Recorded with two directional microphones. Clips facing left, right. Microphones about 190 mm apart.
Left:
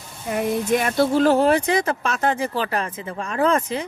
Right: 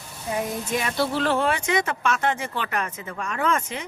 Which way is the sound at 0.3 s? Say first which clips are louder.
Left 7 dB; 50° left (ahead or behind).